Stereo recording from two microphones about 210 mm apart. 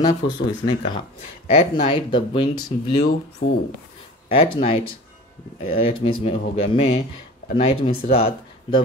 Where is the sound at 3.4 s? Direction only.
40° left (ahead or behind).